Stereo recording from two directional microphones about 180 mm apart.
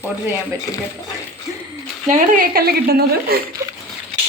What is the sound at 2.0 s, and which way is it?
A woman's voice, 45° right (ahead or behind).